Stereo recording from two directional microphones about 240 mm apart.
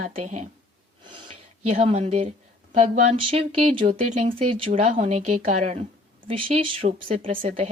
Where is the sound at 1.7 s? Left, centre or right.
Right.